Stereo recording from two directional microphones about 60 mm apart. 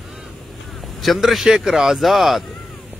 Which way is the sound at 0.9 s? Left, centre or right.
Centre.